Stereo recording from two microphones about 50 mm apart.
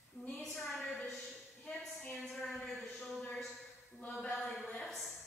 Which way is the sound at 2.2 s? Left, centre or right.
Centre.